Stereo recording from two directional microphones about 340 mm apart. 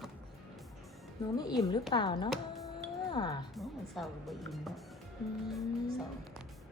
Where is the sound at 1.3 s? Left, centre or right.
Centre.